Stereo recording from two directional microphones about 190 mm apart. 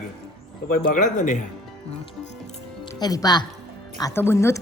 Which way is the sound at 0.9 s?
45° left (ahead or behind).